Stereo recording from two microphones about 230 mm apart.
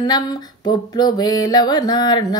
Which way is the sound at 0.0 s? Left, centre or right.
Centre.